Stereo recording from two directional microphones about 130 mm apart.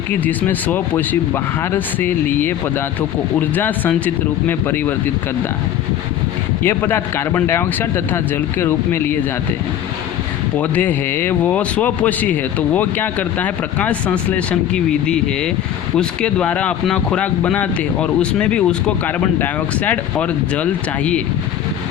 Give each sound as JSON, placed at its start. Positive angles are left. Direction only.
{"t": 0.1, "sound": "speech", "side_deg": 15}
{"t": 6.6, "sound": "speech", "side_deg": 15}
{"t": 10.6, "sound": "speech", "side_deg": 15}